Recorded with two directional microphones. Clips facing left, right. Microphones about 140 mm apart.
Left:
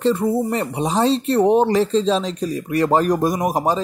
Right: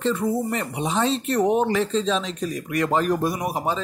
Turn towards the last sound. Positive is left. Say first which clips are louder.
# left 6 dB
turn(degrees=40)  # may be behind; listen again after turning